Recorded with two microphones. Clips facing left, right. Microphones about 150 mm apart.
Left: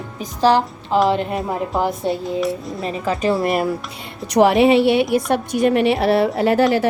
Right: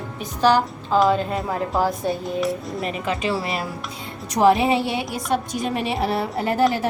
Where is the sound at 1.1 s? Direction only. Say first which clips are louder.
Left 2 dB; 20° left (ahead or behind).